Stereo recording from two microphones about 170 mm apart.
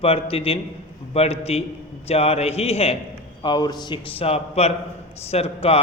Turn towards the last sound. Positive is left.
turn(degrees=35)  # may be behind; listen again after turning